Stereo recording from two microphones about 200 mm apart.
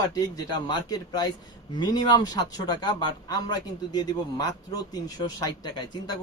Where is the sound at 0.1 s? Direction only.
20° left (ahead or behind).